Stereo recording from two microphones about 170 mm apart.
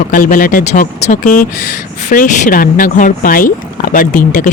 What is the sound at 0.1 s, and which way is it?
Speech, 55° left (ahead or behind).